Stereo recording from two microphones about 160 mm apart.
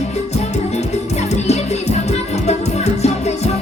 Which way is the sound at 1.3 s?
45° left (ahead or behind).